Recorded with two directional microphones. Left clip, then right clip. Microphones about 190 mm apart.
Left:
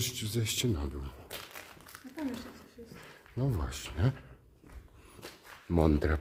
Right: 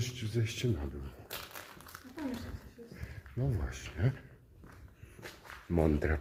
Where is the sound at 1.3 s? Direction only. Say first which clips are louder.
Right 1 dB; centre (ahead or behind).